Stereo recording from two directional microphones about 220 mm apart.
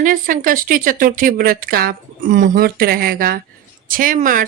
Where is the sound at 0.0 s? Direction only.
40° right (ahead or behind).